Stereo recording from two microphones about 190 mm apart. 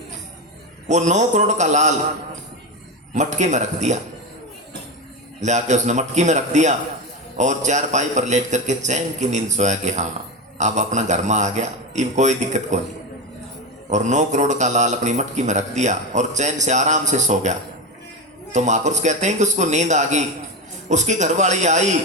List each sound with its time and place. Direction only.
0.9 s speech: 40° right (ahead or behind)
3.2 s speech: 40° right (ahead or behind)
5.4 s speech: 40° right (ahead or behind)
13.9 s speech: 40° right (ahead or behind)